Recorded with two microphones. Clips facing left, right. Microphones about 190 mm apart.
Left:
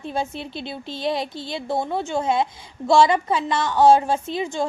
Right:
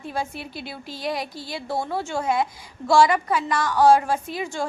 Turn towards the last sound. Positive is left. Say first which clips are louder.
# left 3 dB
turn(degrees=20)  # may be behind; listen again after turning